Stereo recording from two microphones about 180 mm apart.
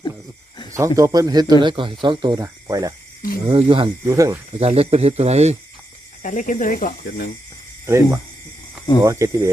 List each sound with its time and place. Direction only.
0.7 s speech: 15° right (ahead or behind)
3.4 s speech: 30° right (ahead or behind)
4.0 s speech: 15° right (ahead or behind)
4.6 s speech: 35° right (ahead or behind)
6.2 s speech: 45° left (ahead or behind)
7.9 s speech: 15° right (ahead or behind)